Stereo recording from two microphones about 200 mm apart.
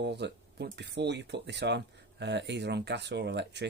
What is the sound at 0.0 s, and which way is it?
Speech, 60° right (ahead or behind).